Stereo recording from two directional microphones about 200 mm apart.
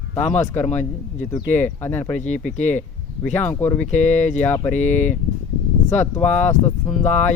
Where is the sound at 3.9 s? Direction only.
35° left (ahead or behind).